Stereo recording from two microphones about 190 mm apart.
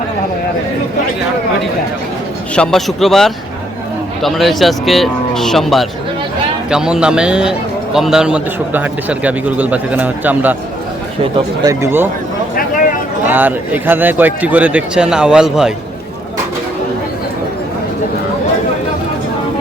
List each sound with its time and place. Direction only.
2.6 s a man's voice: centre (ahead or behind)
13.2 s a man's voice: 10° right (ahead or behind)